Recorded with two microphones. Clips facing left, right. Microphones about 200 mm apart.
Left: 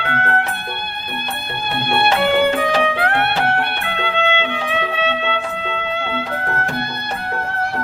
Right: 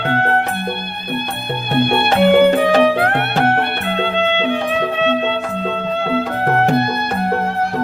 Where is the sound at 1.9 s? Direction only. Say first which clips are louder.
Right 3 dB; 50° right (ahead or behind).